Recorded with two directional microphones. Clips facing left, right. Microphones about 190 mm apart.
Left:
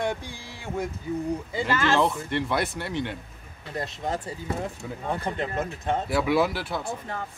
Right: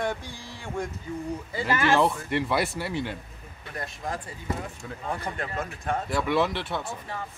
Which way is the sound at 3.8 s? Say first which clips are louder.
Left 4 dB; 25° left (ahead or behind).